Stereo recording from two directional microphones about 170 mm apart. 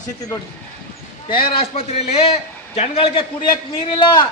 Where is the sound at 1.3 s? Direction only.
30° left (ahead or behind).